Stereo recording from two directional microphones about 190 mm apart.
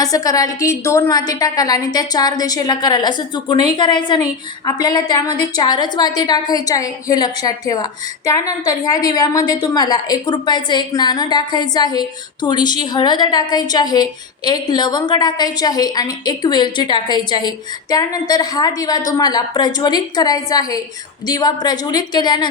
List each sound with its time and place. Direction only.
0.0 s a woman's voice: 20° left (ahead or behind)